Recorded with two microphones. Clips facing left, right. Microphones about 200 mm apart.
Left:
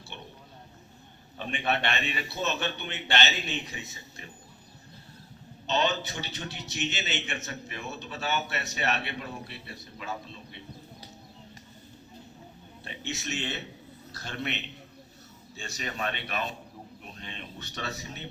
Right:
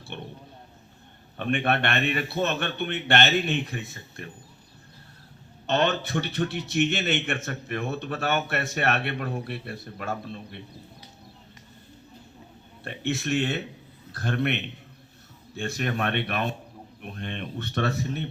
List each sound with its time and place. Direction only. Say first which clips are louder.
0.1 s roaring cats: right 7 dB; 55° right (ahead or behind)
1.4 s a man's voice: right 5 dB; 55° right (ahead or behind)
5.6 s a man's voice: right 4 dB; 55° right (ahead or behind)
12.8 s a man's voice: right 8 dB; 55° right (ahead or behind)